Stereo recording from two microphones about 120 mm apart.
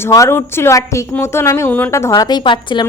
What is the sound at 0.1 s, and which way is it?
Speech, 25° left (ahead or behind).